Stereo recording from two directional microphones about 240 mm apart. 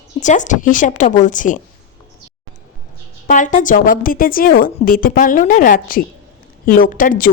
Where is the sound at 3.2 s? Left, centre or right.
Left.